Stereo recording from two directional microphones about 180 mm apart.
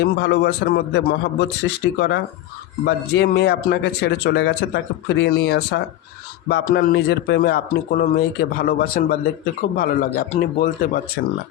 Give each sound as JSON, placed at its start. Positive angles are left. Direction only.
{"t": 0.0, "sound": "a man's voice", "side_deg": 70}
{"t": 6.5, "sound": "a man's voice", "side_deg": 60}